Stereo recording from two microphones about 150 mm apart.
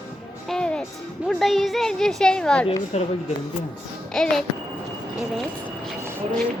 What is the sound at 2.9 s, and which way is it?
Speech, 45° left (ahead or behind).